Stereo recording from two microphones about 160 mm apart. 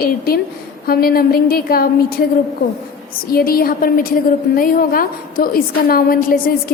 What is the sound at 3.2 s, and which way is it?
A woman's voice, 70° left (ahead or behind).